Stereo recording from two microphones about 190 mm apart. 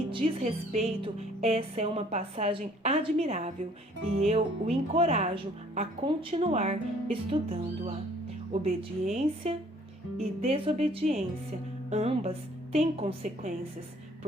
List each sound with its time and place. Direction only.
0.1 s a woman's voice: 30° right (ahead or behind)
9.1 s a woman's voice: 35° right (ahead or behind)